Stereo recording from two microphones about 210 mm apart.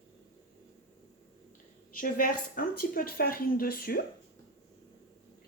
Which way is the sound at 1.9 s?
40° left (ahead or behind).